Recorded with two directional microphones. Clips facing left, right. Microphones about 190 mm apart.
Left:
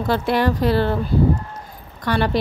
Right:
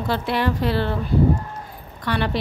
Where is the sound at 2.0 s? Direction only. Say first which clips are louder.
Left 3 dB; 40° left (ahead or behind).